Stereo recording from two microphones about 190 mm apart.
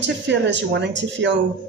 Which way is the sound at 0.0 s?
70° right (ahead or behind).